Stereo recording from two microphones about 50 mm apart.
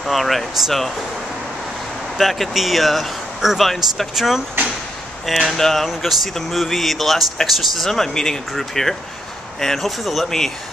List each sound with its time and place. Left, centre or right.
0.0 s speech: centre
2.1 s speech: centre
5.5 s speech: centre